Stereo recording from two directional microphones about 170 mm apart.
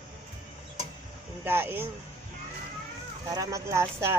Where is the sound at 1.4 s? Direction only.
10° right (ahead or behind).